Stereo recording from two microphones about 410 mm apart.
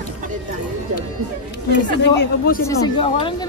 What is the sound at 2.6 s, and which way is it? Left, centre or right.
Speech, centre.